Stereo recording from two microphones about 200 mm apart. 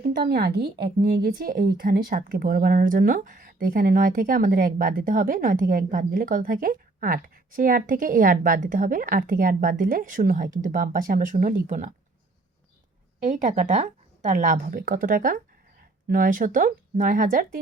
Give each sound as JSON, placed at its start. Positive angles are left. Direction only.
{"t": 0.0, "sound": "speech", "side_deg": -50}
{"t": 13.2, "sound": "a woman's voice", "side_deg": -35}